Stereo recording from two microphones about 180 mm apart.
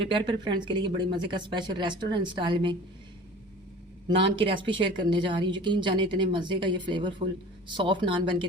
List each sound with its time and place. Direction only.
0.0 s a woman's voice: 25° right (ahead or behind)
4.4 s a woman's voice: 30° right (ahead or behind)